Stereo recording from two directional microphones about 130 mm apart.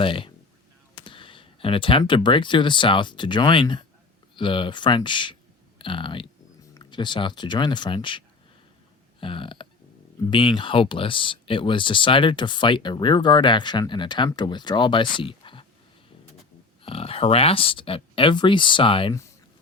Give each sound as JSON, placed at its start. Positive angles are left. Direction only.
{"t": 0.0, "sound": "speech", "side_deg": 40}
{"t": 9.2, "sound": "speech", "side_deg": 40}
{"t": 16.8, "sound": "speech", "side_deg": 50}